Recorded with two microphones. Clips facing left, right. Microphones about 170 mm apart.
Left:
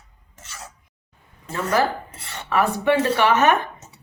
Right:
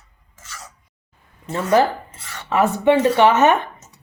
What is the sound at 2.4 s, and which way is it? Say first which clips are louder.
Speech: right 4 dB; 20° right (ahead or behind).